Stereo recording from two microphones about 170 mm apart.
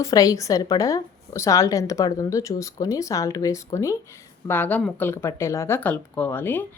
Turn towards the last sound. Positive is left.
turn(degrees=10)  # may be behind; listen again after turning